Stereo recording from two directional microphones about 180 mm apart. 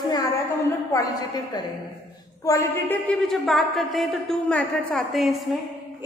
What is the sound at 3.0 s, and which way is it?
A man's voice, centre (ahead or behind).